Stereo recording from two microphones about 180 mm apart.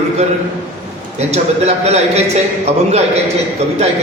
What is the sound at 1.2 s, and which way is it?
A man's voice, 35° right (ahead or behind).